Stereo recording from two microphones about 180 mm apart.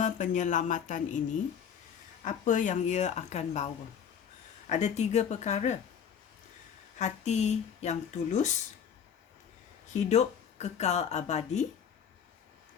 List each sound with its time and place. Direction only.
0.0 s speech: 45° left (ahead or behind)
2.2 s speech: 45° left (ahead or behind)
4.7 s speech: 40° left (ahead or behind)
7.0 s speech: 40° left (ahead or behind)
9.8 s a woman's voice: 40° left (ahead or behind)